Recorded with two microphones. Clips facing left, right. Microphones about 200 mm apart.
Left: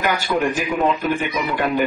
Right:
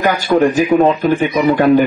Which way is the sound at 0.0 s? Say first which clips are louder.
Right 8 dB; 45° right (ahead or behind).